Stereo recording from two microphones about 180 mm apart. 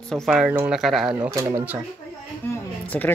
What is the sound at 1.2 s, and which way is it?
Speech, 15° right (ahead or behind).